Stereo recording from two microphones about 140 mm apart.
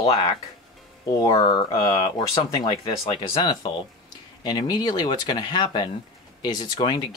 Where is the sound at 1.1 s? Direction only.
25° left (ahead or behind).